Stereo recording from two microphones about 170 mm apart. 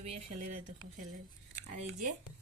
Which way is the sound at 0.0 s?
40° right (ahead or behind).